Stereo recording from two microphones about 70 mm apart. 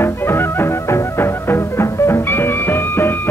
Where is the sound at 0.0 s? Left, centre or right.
Left.